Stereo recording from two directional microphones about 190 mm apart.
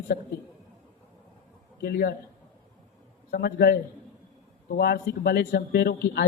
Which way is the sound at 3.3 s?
55° left (ahead or behind).